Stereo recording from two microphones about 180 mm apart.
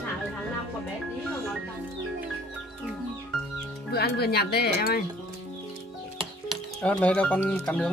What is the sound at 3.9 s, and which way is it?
Speech, 60° left (ahead or behind).